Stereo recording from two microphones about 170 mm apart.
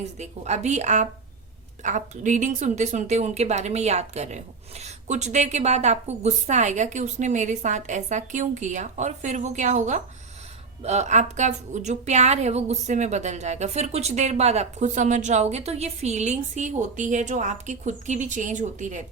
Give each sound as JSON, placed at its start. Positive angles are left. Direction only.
{"t": 0.2, "sound": "a woman's voice", "side_deg": -40}